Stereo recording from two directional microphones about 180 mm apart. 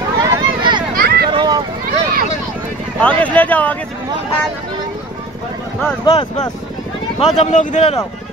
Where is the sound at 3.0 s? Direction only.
10° left (ahead or behind).